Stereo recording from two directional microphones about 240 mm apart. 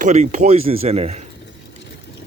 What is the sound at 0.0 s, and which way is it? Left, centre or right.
Speech, right.